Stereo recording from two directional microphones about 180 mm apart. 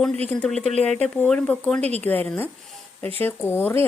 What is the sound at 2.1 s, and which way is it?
Speech, 10° left (ahead or behind).